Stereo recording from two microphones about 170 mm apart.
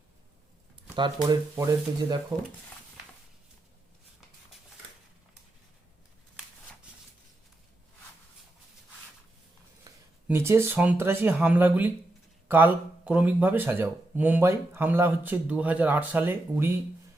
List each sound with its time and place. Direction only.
0.9 s speech: 25° right (ahead or behind)
9.9 s a sound: 20° right (ahead or behind)
10.2 s speech: 15° right (ahead or behind)